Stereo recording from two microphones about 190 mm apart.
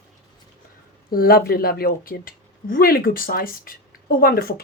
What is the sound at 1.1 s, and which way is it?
Speech, 50° left (ahead or behind).